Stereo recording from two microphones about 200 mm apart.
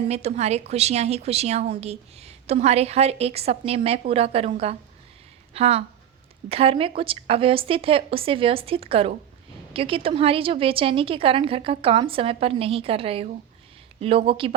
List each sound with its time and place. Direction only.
0.1 s a woman's voice: 30° right (ahead or behind)